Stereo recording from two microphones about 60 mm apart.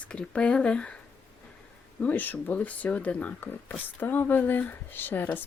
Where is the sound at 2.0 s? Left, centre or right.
Left.